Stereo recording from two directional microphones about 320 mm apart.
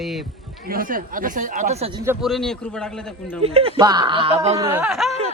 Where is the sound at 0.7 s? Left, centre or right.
Right.